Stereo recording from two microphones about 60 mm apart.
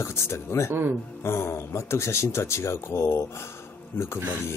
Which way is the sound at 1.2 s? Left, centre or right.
Left.